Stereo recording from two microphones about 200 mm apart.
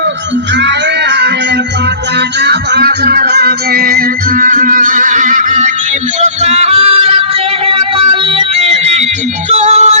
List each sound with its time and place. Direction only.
2.4 s music: 55° right (ahead or behind); by 10.0 s 35° right (ahead or behind)